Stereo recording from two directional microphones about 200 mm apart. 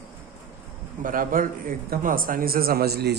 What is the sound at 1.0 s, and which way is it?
Speech, 45° right (ahead or behind).